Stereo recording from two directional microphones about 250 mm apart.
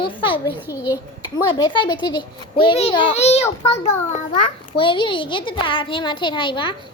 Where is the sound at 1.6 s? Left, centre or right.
Centre.